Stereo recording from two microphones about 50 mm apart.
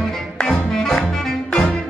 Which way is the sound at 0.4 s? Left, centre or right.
Centre.